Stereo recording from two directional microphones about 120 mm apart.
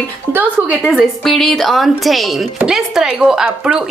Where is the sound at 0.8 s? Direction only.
Centre (ahead or behind).